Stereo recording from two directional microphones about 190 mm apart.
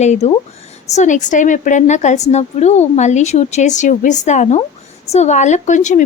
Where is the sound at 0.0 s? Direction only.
35° left (ahead or behind).